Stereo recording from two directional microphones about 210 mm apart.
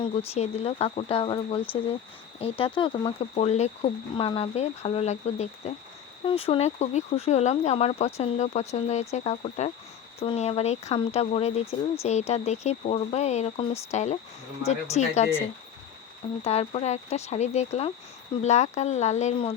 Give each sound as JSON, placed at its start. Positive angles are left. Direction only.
{"t": 0.0, "sound": "speech", "side_deg": 30}
{"t": 16.4, "sound": "speech", "side_deg": 30}